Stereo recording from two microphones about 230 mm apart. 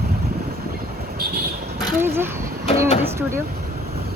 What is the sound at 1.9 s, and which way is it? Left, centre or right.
Speech, centre.